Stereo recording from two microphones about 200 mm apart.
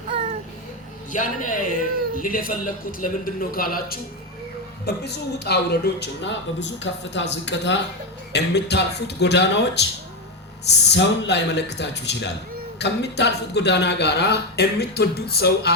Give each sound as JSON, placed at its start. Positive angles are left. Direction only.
{"t": 1.1, "sound": "a man's voice", "side_deg": 40}